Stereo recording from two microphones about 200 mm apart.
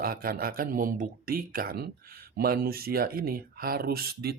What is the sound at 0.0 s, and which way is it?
Speech, 45° right (ahead or behind).